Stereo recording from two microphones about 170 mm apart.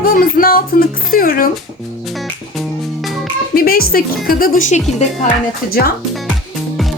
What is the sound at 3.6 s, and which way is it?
Speech, 60° left (ahead or behind).